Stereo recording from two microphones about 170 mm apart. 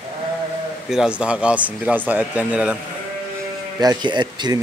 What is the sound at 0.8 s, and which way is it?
Speech, 5° right (ahead or behind).